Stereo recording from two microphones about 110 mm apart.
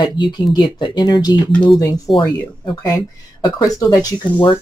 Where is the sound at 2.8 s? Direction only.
30° left (ahead or behind).